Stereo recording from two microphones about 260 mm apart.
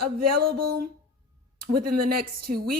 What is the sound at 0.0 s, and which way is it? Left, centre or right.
A woman's voice, right.